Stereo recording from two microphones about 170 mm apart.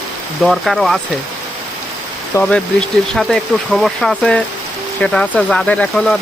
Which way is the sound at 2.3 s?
15° left (ahead or behind).